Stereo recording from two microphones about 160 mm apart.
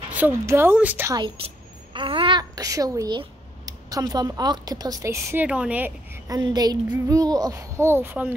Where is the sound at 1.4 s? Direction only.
35° right (ahead or behind).